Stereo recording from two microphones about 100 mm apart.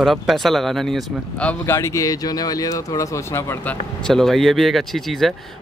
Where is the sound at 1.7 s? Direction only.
30° left (ahead or behind).